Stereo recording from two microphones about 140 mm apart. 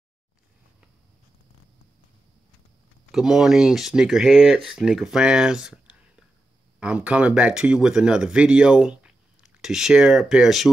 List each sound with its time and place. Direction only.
3.1 s speech: 5° right (ahead or behind)